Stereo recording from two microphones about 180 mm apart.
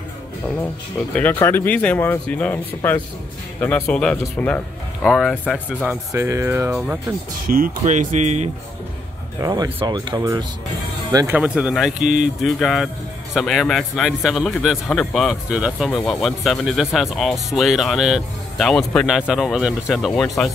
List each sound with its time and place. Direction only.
1.1 s speech: 10° left (ahead or behind)
6.1 s speech: 15° right (ahead or behind)
7.5 s speech: 45° right (ahead or behind)
9.4 s speech: 20° right (ahead or behind)
11.3 s speech: 5° right (ahead or behind)
12.0 s speech: 40° right (ahead or behind)
12.4 s speech: centre (ahead or behind)